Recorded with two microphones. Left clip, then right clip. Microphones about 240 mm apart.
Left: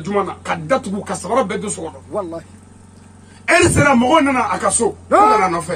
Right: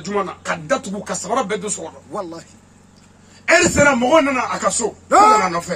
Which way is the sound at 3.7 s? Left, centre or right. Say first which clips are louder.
Even; centre.